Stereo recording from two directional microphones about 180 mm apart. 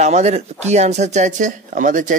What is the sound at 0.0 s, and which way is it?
Speech, 40° right (ahead or behind).